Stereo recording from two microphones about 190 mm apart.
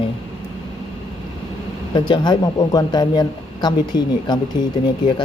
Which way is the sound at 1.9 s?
20° left (ahead or behind).